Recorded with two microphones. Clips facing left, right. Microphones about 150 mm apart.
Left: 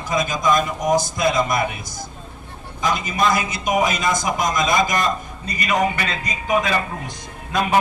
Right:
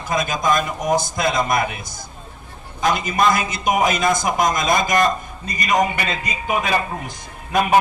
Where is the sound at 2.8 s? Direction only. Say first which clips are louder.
Right 2 dB; 55° right (ahead or behind).